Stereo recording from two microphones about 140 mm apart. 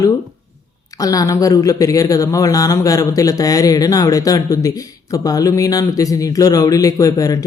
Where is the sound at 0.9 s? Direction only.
25° left (ahead or behind).